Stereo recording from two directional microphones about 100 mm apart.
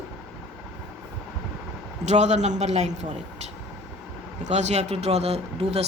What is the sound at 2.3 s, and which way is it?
Speech, 90° right.